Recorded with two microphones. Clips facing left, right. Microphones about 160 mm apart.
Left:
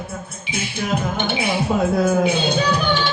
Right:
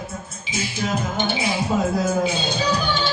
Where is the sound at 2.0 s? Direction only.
60° left (ahead or behind).